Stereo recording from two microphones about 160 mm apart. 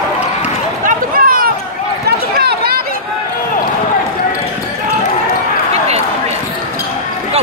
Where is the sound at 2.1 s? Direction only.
80° right.